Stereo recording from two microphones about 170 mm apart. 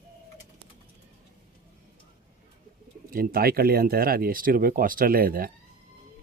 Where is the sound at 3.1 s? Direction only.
60° right (ahead or behind).